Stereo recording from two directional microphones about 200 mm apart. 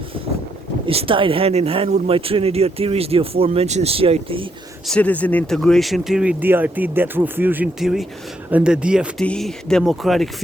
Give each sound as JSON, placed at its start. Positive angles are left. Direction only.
{"t": 0.9, "sound": "speech", "side_deg": -25}
{"t": 4.9, "sound": "speech", "side_deg": 5}